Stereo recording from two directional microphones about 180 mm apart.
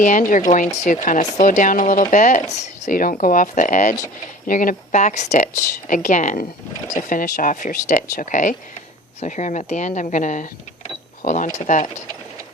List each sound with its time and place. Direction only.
0.0 s speech: 45° left (ahead or behind)